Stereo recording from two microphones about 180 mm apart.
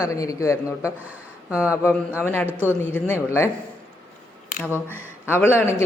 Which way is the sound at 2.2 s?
10° left (ahead or behind).